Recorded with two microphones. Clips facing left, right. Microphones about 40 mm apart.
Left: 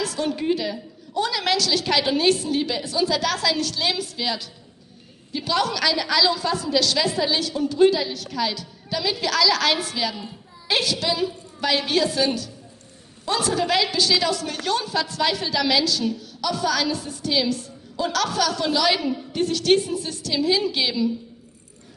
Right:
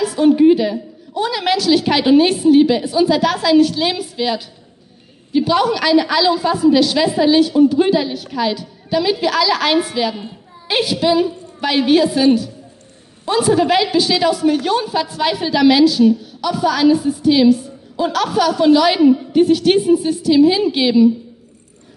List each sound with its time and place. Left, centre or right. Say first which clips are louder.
0.0 s a woman's voice: right 13 dB; centre